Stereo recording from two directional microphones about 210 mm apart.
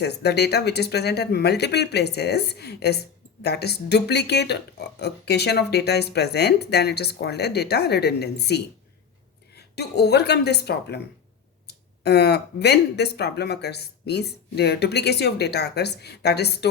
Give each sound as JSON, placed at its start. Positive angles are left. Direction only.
{"t": 0.0, "sound": "speech", "side_deg": 50}